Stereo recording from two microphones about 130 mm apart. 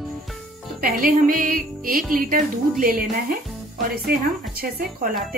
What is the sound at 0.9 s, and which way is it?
Music, 90° right.